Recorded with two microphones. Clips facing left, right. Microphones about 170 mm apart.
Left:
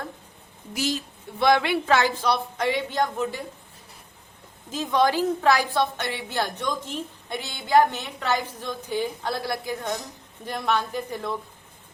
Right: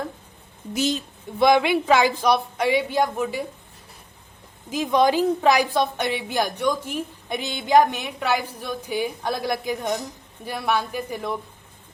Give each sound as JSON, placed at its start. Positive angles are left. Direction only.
{"t": 0.7, "sound": "a woman's voice", "side_deg": -20}
{"t": 4.7, "sound": "a woman's voice", "side_deg": -15}